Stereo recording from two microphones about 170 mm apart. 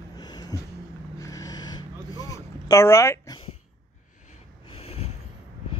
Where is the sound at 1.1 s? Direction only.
20° left (ahead or behind).